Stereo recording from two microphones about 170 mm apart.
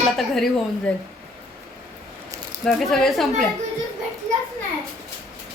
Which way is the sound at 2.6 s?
5° left (ahead or behind).